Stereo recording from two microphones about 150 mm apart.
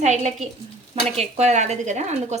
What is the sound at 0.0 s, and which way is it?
A woman's voice, 50° right (ahead or behind).